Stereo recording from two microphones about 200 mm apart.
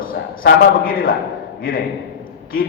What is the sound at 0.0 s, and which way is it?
A man's voice, 45° left (ahead or behind).